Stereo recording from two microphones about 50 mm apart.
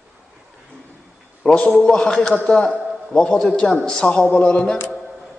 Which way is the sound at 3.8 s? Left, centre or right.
Centre.